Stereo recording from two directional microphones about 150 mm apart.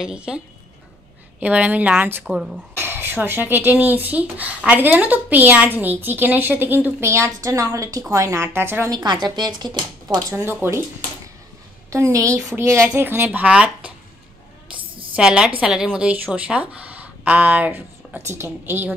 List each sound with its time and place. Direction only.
0.0 s speech: 5° right (ahead or behind)
1.4 s speech: 10° right (ahead or behind)
8.9 s speech: 30° right (ahead or behind)
10.3 s speech: 15° right (ahead or behind)
11.9 s speech: 20° right (ahead or behind)
15.1 s a woman's voice: 5° right (ahead or behind)